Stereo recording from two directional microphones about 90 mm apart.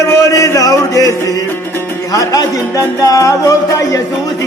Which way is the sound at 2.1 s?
40° left (ahead or behind).